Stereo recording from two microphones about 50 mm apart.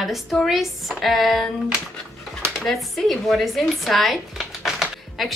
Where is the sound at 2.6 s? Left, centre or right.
Centre.